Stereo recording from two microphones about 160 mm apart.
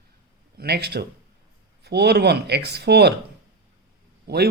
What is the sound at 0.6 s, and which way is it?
Speech, 90° right.